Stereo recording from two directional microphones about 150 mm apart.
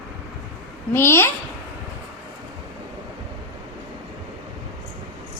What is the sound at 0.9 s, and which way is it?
Speech, 15° left (ahead or behind).